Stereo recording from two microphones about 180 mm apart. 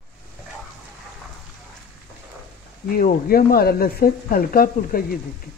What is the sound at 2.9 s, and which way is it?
Speech, 55° left (ahead or behind).